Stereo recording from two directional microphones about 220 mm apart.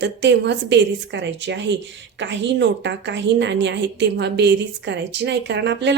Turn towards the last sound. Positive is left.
turn(degrees=-50)  # may be behind; listen again after turning